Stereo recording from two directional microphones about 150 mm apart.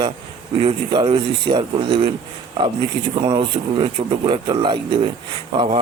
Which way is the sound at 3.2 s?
30° right (ahead or behind).